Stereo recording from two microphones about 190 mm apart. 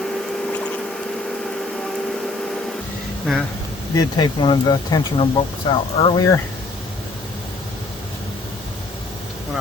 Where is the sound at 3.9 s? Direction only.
20° left (ahead or behind).